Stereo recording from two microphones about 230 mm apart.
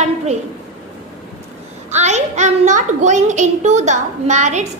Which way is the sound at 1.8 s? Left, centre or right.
Right.